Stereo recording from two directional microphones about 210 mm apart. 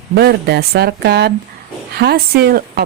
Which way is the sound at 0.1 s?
50° right (ahead or behind).